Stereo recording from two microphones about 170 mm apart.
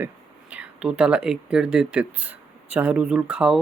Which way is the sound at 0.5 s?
5° right (ahead or behind).